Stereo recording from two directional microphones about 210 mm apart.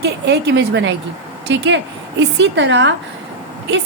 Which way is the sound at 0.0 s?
55° right (ahead or behind).